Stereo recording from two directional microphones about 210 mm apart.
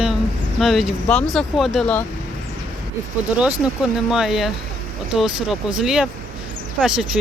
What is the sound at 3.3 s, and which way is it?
Speech, 5° right (ahead or behind).